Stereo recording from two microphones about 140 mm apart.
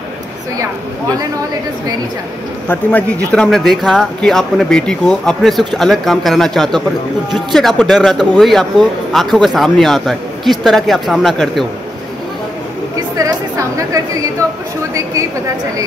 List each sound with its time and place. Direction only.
2.7 s a man's voice: 10° left (ahead or behind)
12.9 s a woman's voice: 25° right (ahead or behind)